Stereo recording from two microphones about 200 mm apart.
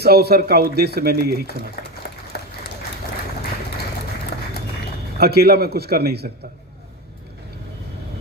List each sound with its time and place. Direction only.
0.0 s speech: 50° right (ahead or behind)
5.2 s speech: 50° right (ahead or behind)